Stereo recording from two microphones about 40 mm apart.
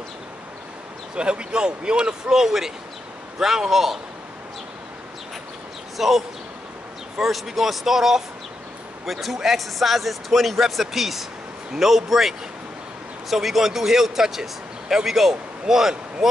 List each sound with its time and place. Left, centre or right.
1.1 s speech: right; by 4.0 s centre
5.9 s a man's voice: centre